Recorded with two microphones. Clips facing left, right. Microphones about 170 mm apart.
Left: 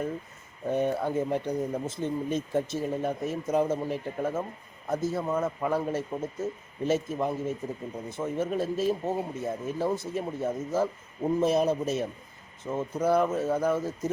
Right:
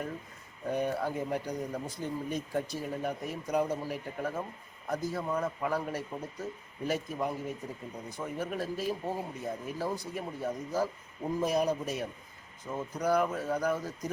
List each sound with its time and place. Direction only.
0.7 s speech: 25° left (ahead or behind)